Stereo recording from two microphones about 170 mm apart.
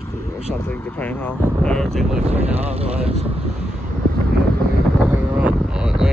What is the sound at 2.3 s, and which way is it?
Speech, 40° right (ahead or behind).